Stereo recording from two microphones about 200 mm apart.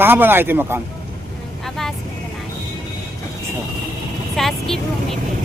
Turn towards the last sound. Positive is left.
turn(degrees=0)  # may be behind; listen again after turning